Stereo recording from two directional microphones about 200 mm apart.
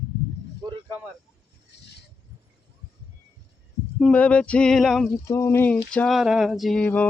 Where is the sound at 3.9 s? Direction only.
5° left (ahead or behind).